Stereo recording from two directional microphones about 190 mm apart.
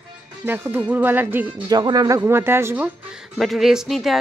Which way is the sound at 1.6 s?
20° right (ahead or behind).